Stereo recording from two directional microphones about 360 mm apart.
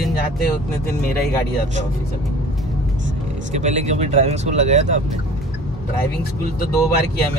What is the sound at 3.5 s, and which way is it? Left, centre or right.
Speech, centre.